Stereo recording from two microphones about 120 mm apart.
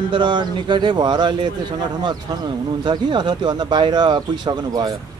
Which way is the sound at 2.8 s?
40° right (ahead or behind).